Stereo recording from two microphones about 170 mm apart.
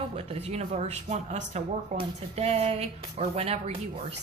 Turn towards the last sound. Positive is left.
turn(degrees=-40)  # may be behind; listen again after turning